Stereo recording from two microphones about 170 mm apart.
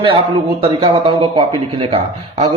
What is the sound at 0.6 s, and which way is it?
Speech, 30° right (ahead or behind).